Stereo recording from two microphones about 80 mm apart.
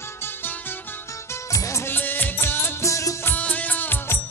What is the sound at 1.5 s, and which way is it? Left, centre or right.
Music, left.